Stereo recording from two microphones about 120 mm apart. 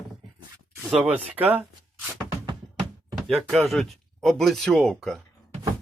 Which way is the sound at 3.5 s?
Centre (ahead or behind).